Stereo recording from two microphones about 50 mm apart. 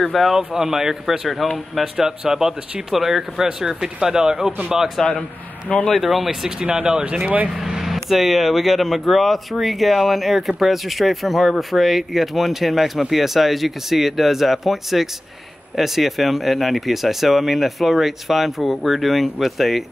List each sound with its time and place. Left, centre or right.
0.0 s speech: centre
6.6 s speech: centre
7.4 s speech: centre